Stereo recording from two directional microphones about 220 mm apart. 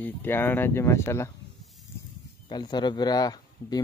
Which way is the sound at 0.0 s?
10° left (ahead or behind).